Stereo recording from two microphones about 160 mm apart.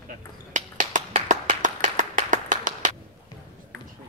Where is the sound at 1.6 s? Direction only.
55° right (ahead or behind).